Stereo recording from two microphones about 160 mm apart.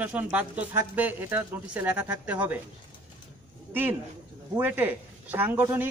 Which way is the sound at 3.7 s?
10° right (ahead or behind).